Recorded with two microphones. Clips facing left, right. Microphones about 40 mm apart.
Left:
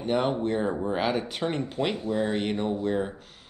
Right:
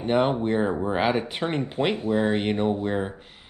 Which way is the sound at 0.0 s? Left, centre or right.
Right.